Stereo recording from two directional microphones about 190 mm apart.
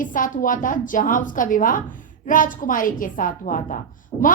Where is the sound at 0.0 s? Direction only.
45° left (ahead or behind).